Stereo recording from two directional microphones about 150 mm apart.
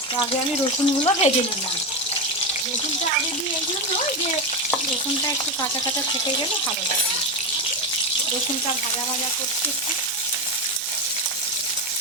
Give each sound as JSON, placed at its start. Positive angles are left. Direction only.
{"t": 0.6, "sound": "speech", "side_deg": 40}